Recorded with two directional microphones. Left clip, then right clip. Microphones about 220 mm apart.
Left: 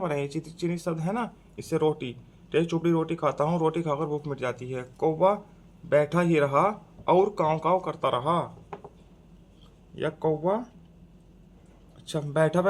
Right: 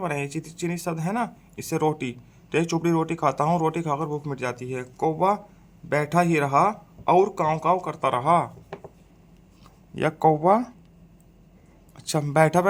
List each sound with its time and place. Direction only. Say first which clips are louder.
0.0 s speech: right 1 dB; 10° right (ahead or behind); by 8.4 s 25° right (ahead or behind)
9.9 s speech: right 7 dB; 45° right (ahead or behind)
11.9 s speech: right 5 dB; 45° right (ahead or behind)